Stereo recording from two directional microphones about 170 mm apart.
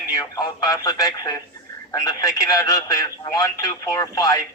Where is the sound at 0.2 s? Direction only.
20° left (ahead or behind).